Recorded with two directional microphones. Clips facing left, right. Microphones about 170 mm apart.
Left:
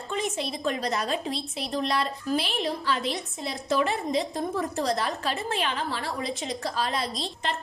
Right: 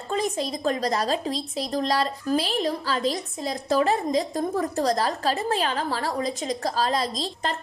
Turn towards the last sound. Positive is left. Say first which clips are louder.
# right 3 dB
turn(degrees=-35)  # may be behind; listen again after turning